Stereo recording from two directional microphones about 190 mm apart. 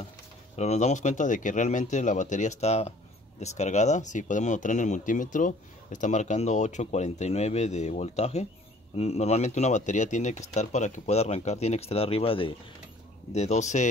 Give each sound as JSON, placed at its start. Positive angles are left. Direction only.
{"t": 0.6, "sound": "speech", "side_deg": 35}